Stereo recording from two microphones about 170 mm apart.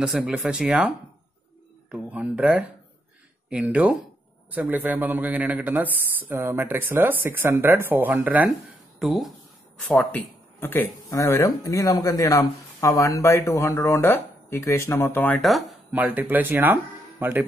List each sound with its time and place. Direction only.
0.0 s speech: 5° right (ahead or behind); by 15.4 s 10° left (ahead or behind)
15.4 s speech: centre (ahead or behind)